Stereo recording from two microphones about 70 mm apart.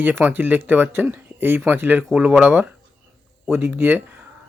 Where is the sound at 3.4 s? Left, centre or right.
Right.